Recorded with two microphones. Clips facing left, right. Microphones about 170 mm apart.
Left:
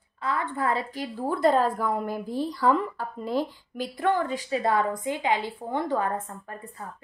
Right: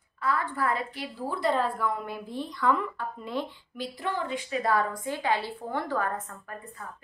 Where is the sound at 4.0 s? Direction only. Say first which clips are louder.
Left 7 dB; 50° left (ahead or behind); by 6.2 s 25° left (ahead or behind).